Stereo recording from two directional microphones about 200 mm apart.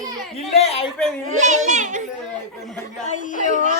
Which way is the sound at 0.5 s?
30° left (ahead or behind).